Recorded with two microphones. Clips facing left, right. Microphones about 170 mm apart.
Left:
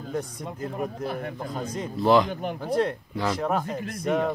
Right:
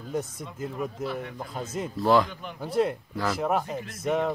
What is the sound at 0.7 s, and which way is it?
Speech, 50° left (ahead or behind).